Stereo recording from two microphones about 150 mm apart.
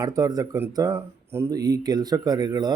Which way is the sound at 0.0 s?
25° right (ahead or behind).